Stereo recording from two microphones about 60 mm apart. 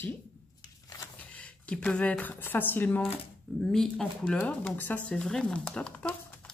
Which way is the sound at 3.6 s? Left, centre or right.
Centre.